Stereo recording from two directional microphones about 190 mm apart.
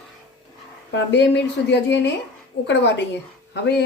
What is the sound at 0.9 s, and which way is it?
A woman's voice, 65° left (ahead or behind).